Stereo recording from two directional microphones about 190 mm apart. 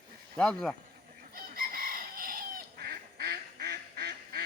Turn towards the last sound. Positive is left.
turn(degrees=-55)  # may be behind; listen again after turning